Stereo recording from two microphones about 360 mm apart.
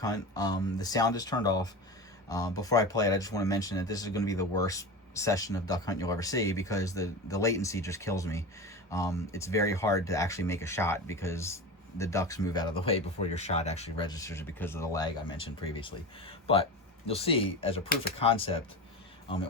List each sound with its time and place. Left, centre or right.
0.0 s speech: centre